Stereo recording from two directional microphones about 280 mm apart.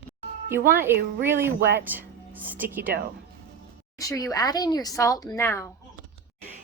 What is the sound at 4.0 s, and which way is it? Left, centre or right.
Speech, centre.